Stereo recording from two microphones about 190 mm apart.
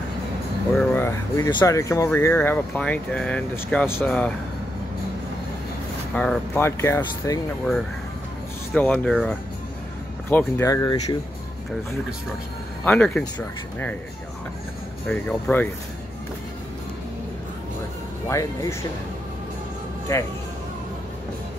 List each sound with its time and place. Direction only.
0.7 s speech: 10° left (ahead or behind)
6.1 s speech: 5° left (ahead or behind)
8.7 s speech: 5° left (ahead or behind)
10.3 s speech: 15° left (ahead or behind)
12.8 s speech: 5° left (ahead or behind)
15.0 s speech: 5° left (ahead or behind)
18.3 s speech: 15° left (ahead or behind)
20.1 s speech: 15° left (ahead or behind)